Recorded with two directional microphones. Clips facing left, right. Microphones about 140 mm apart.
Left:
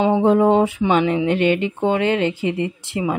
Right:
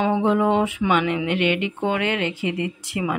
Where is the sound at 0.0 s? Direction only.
35° left (ahead or behind).